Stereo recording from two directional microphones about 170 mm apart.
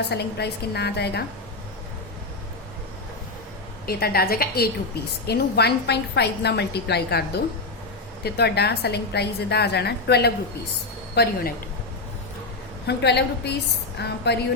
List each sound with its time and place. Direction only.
0.1 s a woman's voice: 75° left (ahead or behind)
3.8 s a woman's voice: 65° left (ahead or behind)
12.9 s a woman's voice: 80° left